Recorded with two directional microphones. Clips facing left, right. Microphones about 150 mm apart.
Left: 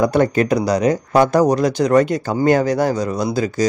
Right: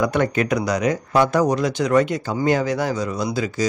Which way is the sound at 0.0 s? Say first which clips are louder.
Left 4 dB; 35° left (ahead or behind).